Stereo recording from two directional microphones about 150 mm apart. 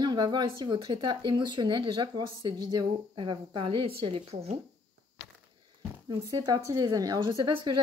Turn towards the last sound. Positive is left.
turn(degrees=-35)  # may be behind; listen again after turning